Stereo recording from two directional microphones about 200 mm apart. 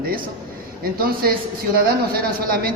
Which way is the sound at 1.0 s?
45° right (ahead or behind).